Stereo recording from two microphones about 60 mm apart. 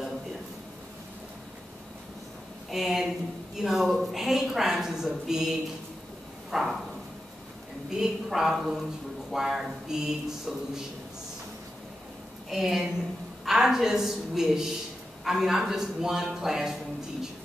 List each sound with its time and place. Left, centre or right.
2.7 s a sound: centre
3.5 s a woman's voice: centre
6.5 s a woman's voice: centre
7.9 s speech: centre
12.4 s a woman's voice: centre